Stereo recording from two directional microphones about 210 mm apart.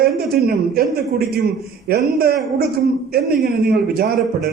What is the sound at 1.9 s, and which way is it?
A man's voice, 45° right (ahead or behind).